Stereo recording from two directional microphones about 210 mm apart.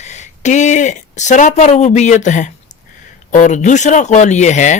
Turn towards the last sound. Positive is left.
turn(degrees=35)  # may be behind; listen again after turning